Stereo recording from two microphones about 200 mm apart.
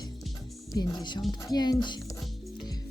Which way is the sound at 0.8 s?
20° left (ahead or behind).